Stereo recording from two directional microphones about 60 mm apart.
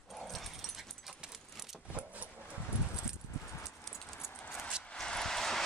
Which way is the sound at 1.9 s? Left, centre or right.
Right.